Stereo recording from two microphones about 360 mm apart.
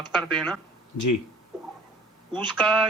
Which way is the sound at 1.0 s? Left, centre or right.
Left.